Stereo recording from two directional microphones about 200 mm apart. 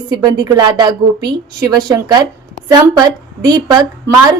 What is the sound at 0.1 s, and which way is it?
A woman's voice, 20° right (ahead or behind).